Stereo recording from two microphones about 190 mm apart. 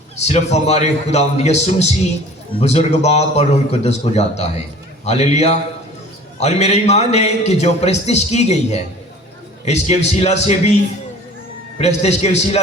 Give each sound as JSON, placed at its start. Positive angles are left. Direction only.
{"t": 0.2, "sound": "a man's voice", "side_deg": 35}
{"t": 11.8, "sound": "a man's voice", "side_deg": 35}